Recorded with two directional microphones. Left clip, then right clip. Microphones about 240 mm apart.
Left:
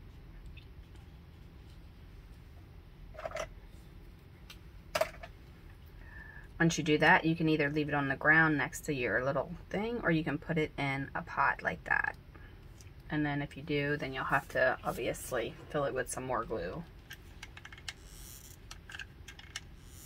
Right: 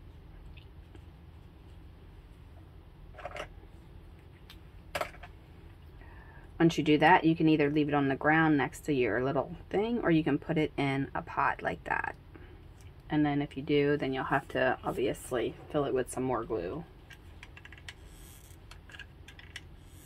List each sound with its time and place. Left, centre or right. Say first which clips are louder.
6.6 s speech: right 3 dB; right
13.1 s speech: right 5 dB; right